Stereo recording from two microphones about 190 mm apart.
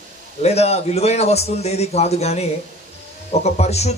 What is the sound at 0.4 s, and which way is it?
A man's voice, 35° left (ahead or behind).